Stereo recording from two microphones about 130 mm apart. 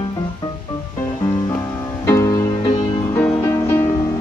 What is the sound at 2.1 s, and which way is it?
Music, 25° left (ahead or behind).